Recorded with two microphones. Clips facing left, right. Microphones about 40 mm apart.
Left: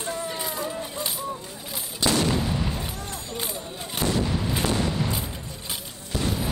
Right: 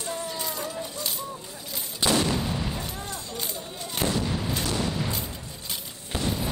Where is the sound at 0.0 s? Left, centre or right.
Left.